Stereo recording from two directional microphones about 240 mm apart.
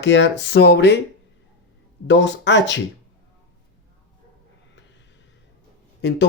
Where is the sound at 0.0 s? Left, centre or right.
Left.